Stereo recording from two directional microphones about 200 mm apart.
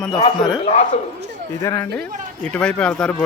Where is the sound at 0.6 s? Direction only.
30° left (ahead or behind).